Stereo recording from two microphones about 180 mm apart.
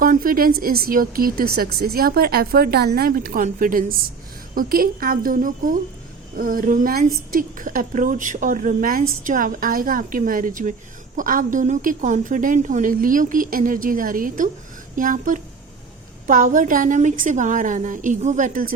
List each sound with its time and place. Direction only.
0.0 s a woman's voice: 50° right (ahead or behind)